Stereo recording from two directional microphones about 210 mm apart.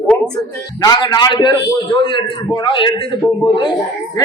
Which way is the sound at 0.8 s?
20° left (ahead or behind).